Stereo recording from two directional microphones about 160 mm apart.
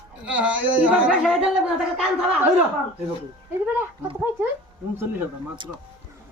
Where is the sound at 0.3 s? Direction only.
10° right (ahead or behind).